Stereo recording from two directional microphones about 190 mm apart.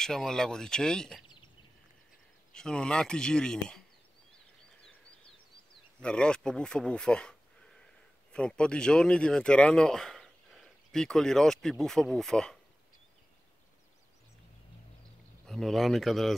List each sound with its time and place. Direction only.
0.0 s speech: centre (ahead or behind)
1.2 s a sound: 25° left (ahead or behind)
2.5 s speech: 5° left (ahead or behind)
5.9 s speech: 5° left (ahead or behind)
15.4 s speech: centre (ahead or behind)